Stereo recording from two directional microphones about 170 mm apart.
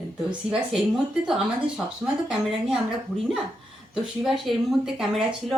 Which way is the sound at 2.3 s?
5° right (ahead or behind).